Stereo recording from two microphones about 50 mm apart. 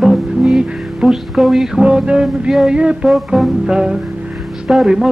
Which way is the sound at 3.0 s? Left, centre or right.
Centre.